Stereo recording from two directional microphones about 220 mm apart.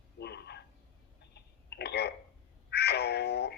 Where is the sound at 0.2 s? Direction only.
50° left (ahead or behind).